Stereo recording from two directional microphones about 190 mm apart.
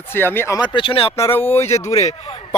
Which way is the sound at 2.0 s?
35° left (ahead or behind).